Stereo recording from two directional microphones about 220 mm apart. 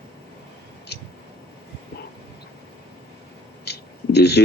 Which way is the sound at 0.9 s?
50° left (ahead or behind).